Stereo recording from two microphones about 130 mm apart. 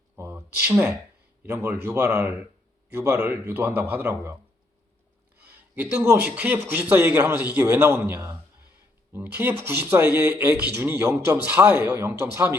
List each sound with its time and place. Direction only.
0.2 s a sound: 15° right (ahead or behind)
1.5 s a man's voice: 20° right (ahead or behind)
5.7 s a man's voice: 15° right (ahead or behind)